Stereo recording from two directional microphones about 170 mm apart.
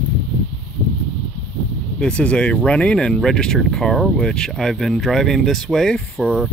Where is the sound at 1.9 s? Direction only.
5° left (ahead or behind).